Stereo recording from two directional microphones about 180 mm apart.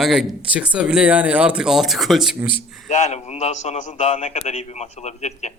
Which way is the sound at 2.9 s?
40° left (ahead or behind).